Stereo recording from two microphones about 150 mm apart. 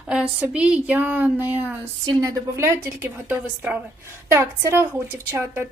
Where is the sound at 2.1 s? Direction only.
25° right (ahead or behind).